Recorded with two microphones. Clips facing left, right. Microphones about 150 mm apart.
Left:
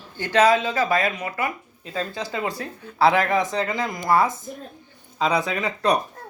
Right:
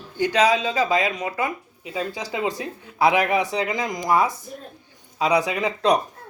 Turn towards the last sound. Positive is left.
turn(degrees=-10)  # may be behind; listen again after turning